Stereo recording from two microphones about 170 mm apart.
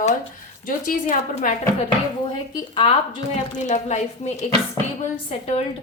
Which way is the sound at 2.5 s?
30° left (ahead or behind).